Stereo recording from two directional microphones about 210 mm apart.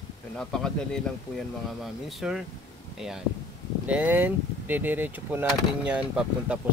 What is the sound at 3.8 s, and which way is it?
Speech, 5° right (ahead or behind).